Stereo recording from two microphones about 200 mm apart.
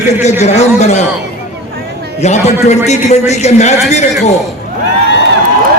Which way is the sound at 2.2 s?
35° left (ahead or behind).